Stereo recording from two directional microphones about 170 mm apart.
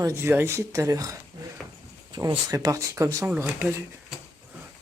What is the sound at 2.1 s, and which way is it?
Speech, 20° right (ahead or behind).